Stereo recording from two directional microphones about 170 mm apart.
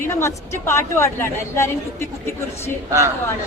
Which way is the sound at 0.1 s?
15° left (ahead or behind).